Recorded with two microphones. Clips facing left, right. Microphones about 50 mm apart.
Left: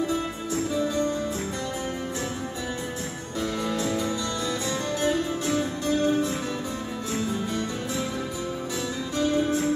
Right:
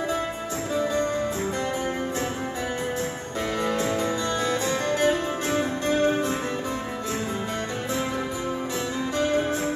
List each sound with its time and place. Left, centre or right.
0.7 s music: right
3.6 s music: right
9.2 s music: right